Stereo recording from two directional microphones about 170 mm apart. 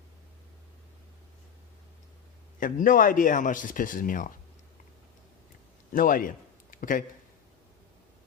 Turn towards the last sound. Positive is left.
turn(degrees=55)  # may be behind; listen again after turning